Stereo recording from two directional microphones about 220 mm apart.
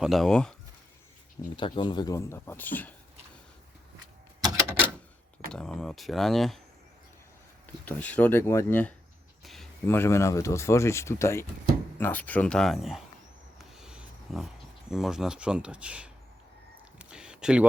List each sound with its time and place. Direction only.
0.0 s speech: centre (ahead or behind)
1.4 s speech: 20° left (ahead or behind)
5.5 s speech: 5° left (ahead or behind)
7.9 s speech: 5° left (ahead or behind)
13.6 s a sound: centre (ahead or behind)